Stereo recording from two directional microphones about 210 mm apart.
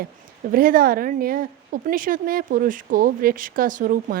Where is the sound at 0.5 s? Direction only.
45° right (ahead or behind).